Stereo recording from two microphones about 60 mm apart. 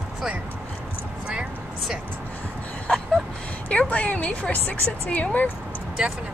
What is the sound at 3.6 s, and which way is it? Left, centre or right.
A woman's voice, left.